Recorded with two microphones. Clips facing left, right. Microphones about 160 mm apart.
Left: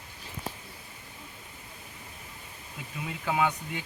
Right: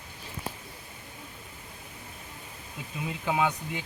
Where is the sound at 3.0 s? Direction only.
15° right (ahead or behind).